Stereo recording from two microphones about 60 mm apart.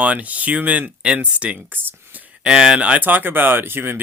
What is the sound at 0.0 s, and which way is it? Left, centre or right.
Speech, right.